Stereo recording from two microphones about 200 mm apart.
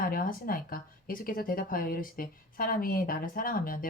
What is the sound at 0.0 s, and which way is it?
Speech, 45° left (ahead or behind).